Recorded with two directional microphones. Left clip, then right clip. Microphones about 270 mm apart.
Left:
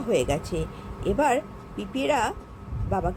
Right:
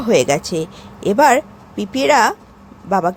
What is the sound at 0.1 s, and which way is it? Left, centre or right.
Speech, centre.